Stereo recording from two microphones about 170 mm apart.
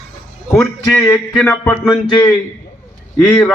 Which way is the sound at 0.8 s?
15° left (ahead or behind).